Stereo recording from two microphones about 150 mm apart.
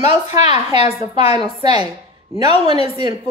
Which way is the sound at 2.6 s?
40° left (ahead or behind).